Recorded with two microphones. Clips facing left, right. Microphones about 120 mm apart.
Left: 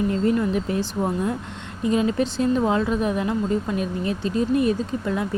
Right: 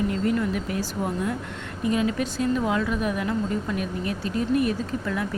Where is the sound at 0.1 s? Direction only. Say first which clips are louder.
Left 3 dB; 25° left (ahead or behind).